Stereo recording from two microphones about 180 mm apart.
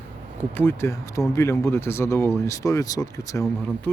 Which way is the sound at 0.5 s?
10° left (ahead or behind).